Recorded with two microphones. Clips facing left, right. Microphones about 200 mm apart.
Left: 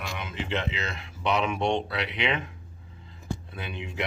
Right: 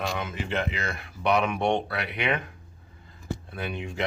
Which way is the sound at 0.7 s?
20° left (ahead or behind).